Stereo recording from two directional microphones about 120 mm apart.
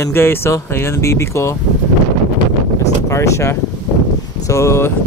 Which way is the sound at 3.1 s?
25° left (ahead or behind).